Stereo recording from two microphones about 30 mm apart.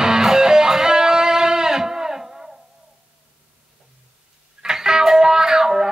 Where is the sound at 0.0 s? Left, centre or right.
Centre.